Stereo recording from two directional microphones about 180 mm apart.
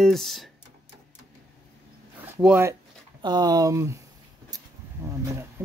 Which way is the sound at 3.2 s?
20° right (ahead or behind).